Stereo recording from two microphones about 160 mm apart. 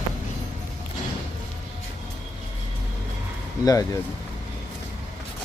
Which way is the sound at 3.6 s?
20° left (ahead or behind).